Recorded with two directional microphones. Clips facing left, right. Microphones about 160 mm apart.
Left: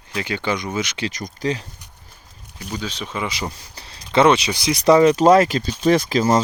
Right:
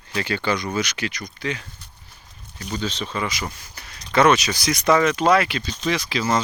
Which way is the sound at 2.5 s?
10° left (ahead or behind).